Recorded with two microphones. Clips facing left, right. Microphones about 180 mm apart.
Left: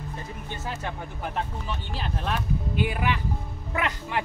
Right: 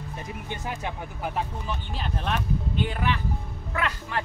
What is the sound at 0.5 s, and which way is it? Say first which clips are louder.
Speech: even; 15° right (ahead or behind).